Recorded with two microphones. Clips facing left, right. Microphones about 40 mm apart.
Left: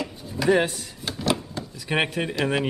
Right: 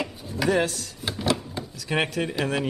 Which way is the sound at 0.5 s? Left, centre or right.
Left.